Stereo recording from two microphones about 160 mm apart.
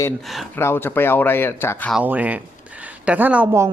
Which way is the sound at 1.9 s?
10° right (ahead or behind).